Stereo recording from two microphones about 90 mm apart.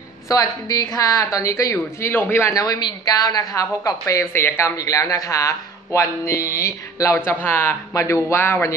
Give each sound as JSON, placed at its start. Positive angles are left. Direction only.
{"t": 0.3, "sound": "speech", "side_deg": 40}
{"t": 2.5, "sound": "speech", "side_deg": 40}
{"t": 4.0, "sound": "speech", "side_deg": 30}
{"t": 4.7, "sound": "speech", "side_deg": 40}
{"t": 7.2, "sound": "speech", "side_deg": 25}